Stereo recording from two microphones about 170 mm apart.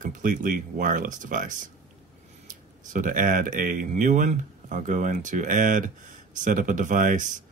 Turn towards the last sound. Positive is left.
turn(degrees=-50)  # may be behind; listen again after turning